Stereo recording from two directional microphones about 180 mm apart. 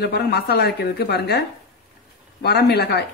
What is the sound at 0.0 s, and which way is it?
Speech, 65° left (ahead or behind).